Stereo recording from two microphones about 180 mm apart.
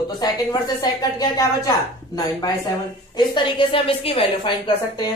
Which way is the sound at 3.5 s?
30° left (ahead or behind).